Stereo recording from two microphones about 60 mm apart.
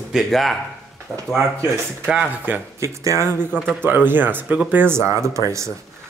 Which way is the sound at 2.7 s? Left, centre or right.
Right.